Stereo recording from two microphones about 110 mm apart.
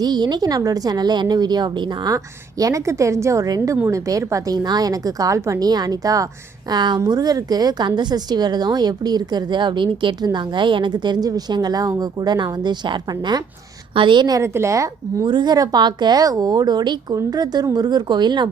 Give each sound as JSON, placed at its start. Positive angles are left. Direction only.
{"t": 0.0, "sound": "a woman's voice", "side_deg": -40}
{"t": 14.4, "sound": "speech", "side_deg": -25}
{"t": 15.3, "sound": "speech", "side_deg": -40}